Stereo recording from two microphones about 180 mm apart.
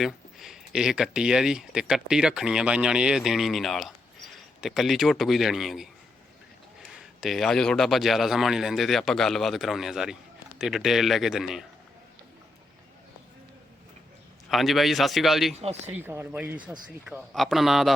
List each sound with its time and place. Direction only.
0.0 s speech: centre (ahead or behind)
7.0 s speech: centre (ahead or behind)
14.5 s speech: centre (ahead or behind)
15.5 s speech: 35° right (ahead or behind)
15.9 s speech: 10° right (ahead or behind)